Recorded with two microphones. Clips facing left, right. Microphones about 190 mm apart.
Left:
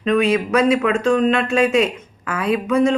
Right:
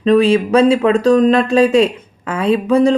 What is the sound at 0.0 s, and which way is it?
Speech, 30° right (ahead or behind).